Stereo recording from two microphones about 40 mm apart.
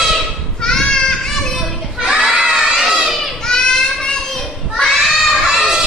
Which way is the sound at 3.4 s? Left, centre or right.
Centre.